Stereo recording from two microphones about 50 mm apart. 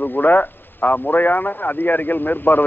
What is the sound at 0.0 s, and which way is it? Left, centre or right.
Speech, left.